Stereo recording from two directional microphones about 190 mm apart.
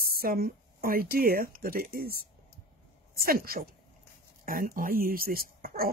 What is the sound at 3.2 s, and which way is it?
Speech, 50° right (ahead or behind).